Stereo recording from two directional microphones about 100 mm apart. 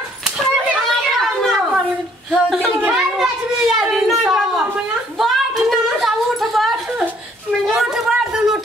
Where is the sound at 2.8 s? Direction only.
5° right (ahead or behind).